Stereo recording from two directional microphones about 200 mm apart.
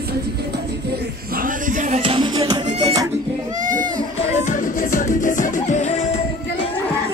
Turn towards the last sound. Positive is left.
turn(degrees=35)  # may be behind; listen again after turning